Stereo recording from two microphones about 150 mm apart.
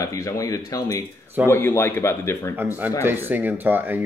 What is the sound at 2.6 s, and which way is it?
Speech, 10° right (ahead or behind).